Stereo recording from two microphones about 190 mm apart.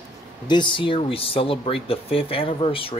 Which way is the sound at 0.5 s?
25° left (ahead or behind).